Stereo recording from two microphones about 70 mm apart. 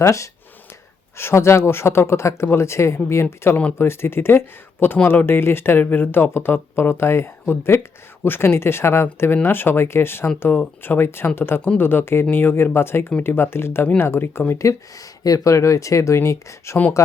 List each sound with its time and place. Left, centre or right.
0.0 s speech: left